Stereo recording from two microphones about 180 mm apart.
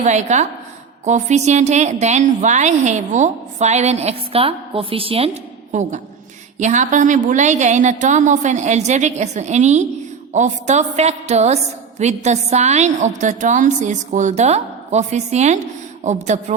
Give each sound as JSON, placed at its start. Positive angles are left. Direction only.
{"t": 0.0, "sound": "a woman's voice", "side_deg": -40}